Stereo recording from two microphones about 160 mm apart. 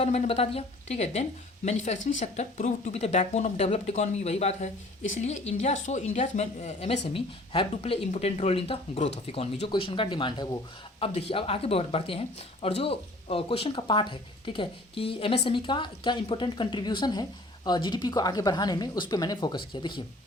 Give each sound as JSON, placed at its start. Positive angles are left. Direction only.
{"t": 0.0, "sound": "a woman's voice", "side_deg": 40}